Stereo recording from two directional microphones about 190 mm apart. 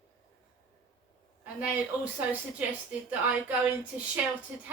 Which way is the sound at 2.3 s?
5° right (ahead or behind).